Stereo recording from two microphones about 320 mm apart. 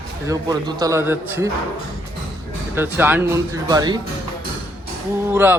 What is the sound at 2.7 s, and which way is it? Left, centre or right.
Speech, centre.